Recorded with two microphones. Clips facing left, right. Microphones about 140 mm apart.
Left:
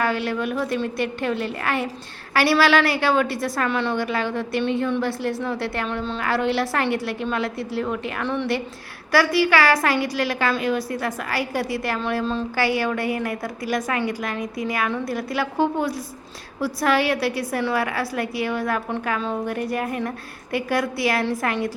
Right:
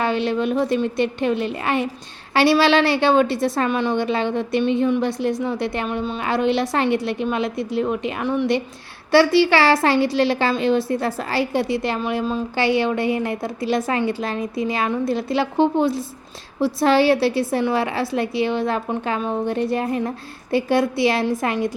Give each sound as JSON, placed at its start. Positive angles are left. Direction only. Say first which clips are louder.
{"t": 0.0, "sound": "a woman's voice", "louder": "right 3 dB", "side_deg": -25}